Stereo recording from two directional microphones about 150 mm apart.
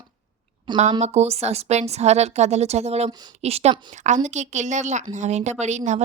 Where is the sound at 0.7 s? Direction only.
30° right (ahead or behind).